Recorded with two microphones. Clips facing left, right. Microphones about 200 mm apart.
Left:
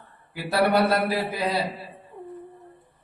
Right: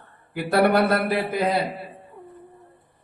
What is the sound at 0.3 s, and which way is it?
A man's voice, 50° right (ahead or behind).